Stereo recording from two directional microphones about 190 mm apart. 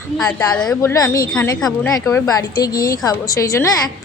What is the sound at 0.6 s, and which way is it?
Speech, 5° left (ahead or behind).